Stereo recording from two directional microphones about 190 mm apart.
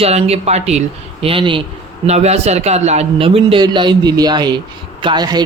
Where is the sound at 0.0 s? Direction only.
35° right (ahead or behind).